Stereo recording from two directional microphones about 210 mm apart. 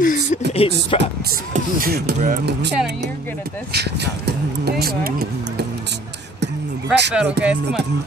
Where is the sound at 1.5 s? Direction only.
45° right (ahead or behind).